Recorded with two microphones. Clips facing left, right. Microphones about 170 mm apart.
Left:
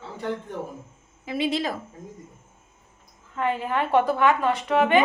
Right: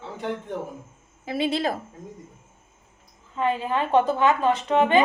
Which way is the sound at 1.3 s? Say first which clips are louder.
Right 1 dB; 35° right (ahead or behind).